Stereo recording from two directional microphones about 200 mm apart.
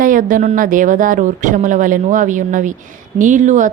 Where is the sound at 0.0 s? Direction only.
45° right (ahead or behind).